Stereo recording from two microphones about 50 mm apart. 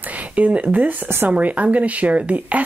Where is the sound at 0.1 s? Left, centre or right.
Right.